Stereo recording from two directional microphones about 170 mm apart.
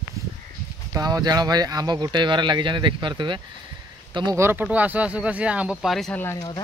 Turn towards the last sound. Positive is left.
turn(degrees=15)  # may be behind; listen again after turning